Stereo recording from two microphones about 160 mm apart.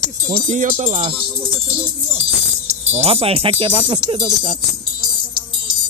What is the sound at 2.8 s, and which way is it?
Speech, 40° right (ahead or behind).